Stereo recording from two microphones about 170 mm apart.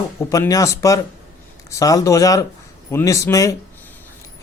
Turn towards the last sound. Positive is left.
turn(degrees=20)  # may be behind; listen again after turning